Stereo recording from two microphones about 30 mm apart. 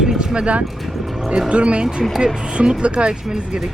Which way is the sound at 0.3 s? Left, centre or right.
Right.